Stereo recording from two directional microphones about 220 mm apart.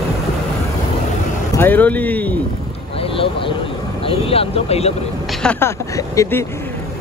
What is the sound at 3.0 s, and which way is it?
Speech, 25° left (ahead or behind).